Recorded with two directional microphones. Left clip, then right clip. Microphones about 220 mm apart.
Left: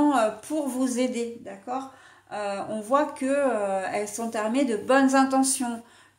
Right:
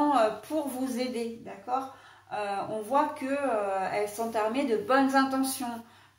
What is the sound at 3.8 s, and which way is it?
A woman's voice, 50° left (ahead or behind).